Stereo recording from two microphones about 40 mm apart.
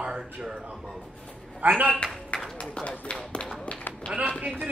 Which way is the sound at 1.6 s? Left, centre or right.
Right.